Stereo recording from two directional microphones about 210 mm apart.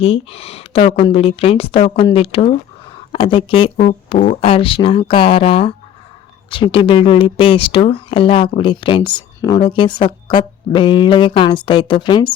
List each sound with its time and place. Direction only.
0.0 s speech: 25° left (ahead or behind)